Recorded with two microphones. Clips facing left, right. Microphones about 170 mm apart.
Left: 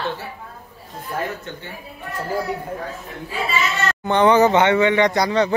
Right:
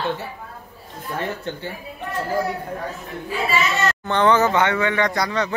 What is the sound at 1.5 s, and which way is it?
Speech, 30° right (ahead or behind).